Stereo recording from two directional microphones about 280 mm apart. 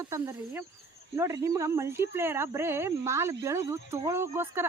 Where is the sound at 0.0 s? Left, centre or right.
Centre.